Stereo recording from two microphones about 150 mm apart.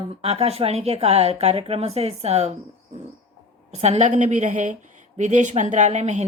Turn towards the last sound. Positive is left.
turn(degrees=-50)  # may be behind; listen again after turning